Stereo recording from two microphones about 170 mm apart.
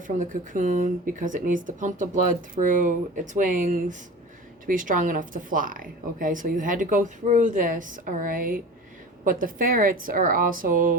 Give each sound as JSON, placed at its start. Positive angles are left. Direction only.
{"t": 0.2, "sound": "a woman's voice", "side_deg": -50}